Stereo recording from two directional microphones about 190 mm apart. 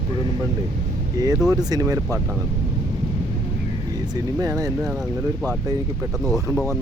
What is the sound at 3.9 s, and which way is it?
Speech, 20° right (ahead or behind).